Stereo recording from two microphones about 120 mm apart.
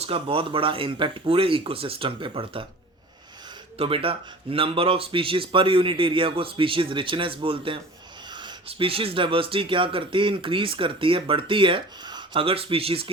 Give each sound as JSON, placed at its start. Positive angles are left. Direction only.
{"t": 0.0, "sound": "speech", "side_deg": -50}
{"t": 3.8, "sound": "speech", "side_deg": -50}
{"t": 8.3, "sound": "a sound", "side_deg": -40}
{"t": 8.6, "sound": "speech", "side_deg": -50}